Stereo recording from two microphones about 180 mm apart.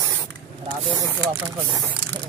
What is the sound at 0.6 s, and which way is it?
Spray, 30° right (ahead or behind).